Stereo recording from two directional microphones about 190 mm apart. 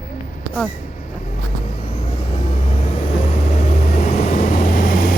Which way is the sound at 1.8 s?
35° left (ahead or behind).